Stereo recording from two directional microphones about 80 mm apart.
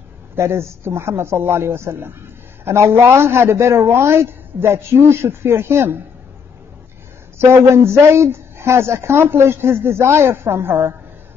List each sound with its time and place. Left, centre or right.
0.4 s a woman's voice: right
7.3 s a woman's voice: right